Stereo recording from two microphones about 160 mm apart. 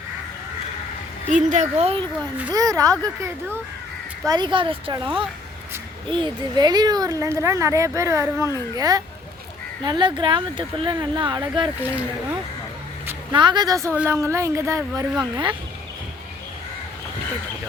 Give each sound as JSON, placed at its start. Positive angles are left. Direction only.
{"t": 1.3, "sound": "speech", "side_deg": -50}
{"t": 2.5, "sound": "speech", "side_deg": -20}
{"t": 4.3, "sound": "speech", "side_deg": -30}
{"t": 11.8, "sound": "speech", "side_deg": -10}
{"t": 13.3, "sound": "speech", "side_deg": -30}